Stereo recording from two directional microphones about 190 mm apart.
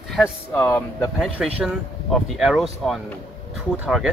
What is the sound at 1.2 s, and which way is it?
Speech, 5° right (ahead or behind).